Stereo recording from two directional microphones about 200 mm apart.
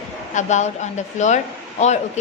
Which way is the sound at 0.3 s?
35° left (ahead or behind).